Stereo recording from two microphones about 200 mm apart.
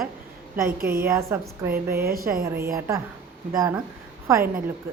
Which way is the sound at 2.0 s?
45° right (ahead or behind).